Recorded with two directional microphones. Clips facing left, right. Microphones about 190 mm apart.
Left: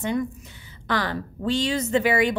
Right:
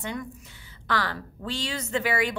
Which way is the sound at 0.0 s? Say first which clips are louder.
Left 8 dB; 20° left (ahead or behind).